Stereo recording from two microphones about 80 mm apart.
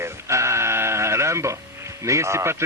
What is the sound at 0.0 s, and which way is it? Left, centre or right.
Sheep, right.